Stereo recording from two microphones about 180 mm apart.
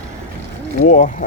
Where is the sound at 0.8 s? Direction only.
45° left (ahead or behind).